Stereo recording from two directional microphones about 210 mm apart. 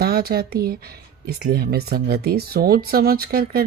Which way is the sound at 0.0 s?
45° right (ahead or behind).